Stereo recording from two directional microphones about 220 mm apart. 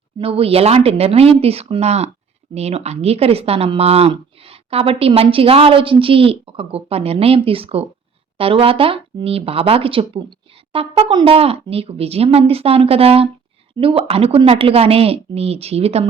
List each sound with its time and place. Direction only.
0.2 s speech: 25° right (ahead or behind)